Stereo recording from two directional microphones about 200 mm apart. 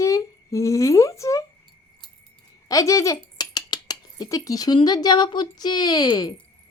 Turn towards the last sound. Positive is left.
turn(degrees=20)  # may be behind; listen again after turning